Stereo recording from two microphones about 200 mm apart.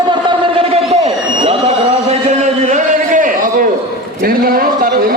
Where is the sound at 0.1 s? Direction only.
25° right (ahead or behind).